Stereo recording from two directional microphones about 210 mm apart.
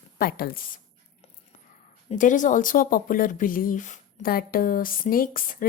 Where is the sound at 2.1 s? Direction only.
35° left (ahead or behind).